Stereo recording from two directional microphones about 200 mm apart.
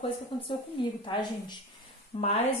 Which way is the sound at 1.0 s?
25° left (ahead or behind).